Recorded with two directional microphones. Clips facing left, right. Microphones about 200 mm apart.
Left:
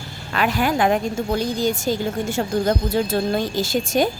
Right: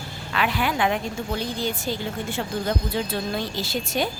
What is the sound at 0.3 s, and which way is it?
A woman's voice, 45° left (ahead or behind).